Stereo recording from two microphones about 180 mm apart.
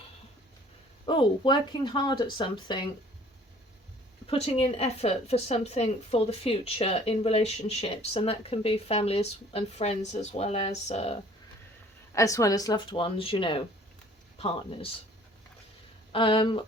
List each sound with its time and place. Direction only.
1.0 s speech: 25° left (ahead or behind)
4.3 s a woman's voice: 30° left (ahead or behind)
12.1 s a woman's voice: 20° left (ahead or behind)
16.1 s speech: 30° left (ahead or behind)